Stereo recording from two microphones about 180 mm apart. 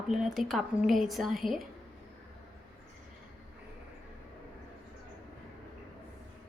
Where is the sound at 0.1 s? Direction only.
Centre (ahead or behind).